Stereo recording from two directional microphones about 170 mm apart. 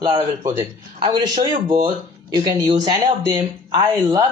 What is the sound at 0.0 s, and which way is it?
A man's voice, 25° right (ahead or behind).